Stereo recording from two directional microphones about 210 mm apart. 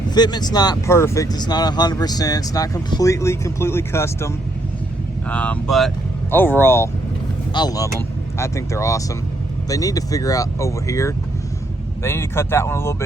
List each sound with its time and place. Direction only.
0.1 s speech: 20° left (ahead or behind)
5.3 s speech: 5° left (ahead or behind)